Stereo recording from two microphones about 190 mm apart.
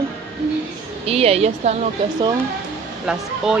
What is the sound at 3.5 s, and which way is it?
Speech, centre (ahead or behind).